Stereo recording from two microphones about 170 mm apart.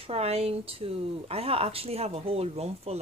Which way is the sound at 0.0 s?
35° right (ahead or behind).